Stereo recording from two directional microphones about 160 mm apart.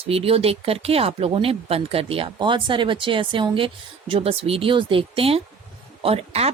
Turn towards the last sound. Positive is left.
turn(degrees=-40)  # may be behind; listen again after turning